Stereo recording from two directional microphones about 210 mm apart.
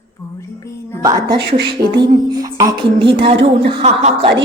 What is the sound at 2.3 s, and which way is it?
Beatboxing, 15° right (ahead or behind).